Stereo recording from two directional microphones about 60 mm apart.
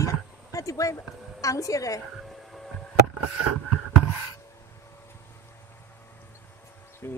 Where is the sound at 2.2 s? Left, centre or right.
Centre.